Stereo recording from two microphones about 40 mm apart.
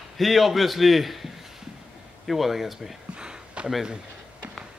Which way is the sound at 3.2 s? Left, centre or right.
Right.